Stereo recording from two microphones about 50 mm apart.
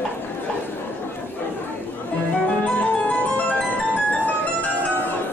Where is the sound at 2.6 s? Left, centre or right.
Left.